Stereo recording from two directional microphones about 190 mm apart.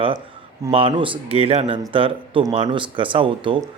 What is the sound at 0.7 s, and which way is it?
A man's voice, 30° right (ahead or behind).